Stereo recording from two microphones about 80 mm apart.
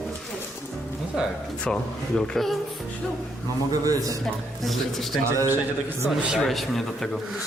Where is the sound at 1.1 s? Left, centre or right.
Centre.